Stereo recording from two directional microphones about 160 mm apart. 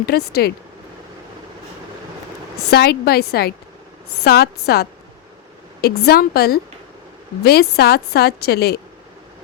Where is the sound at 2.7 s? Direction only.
85° left.